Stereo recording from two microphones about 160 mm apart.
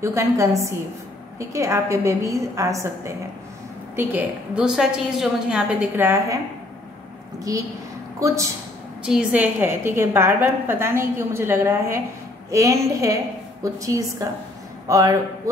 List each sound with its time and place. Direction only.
0.0 s a woman's voice: 20° right (ahead or behind)
9.0 s a woman's voice: 5° right (ahead or behind)